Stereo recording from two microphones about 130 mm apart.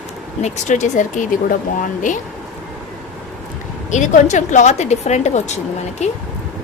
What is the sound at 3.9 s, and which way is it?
Speech, 70° left (ahead or behind).